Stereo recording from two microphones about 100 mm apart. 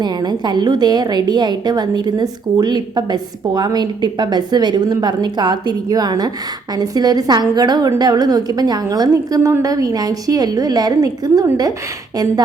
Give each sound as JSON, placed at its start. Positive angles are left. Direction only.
{"t": 0.0, "sound": "a woman's voice", "side_deg": -45}